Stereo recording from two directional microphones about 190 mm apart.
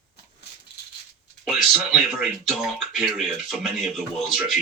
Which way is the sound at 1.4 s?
Centre (ahead or behind).